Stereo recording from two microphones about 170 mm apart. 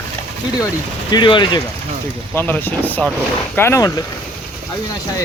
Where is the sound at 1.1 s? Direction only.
25° left (ahead or behind).